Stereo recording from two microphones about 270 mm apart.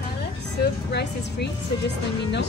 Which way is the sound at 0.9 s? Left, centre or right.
Left.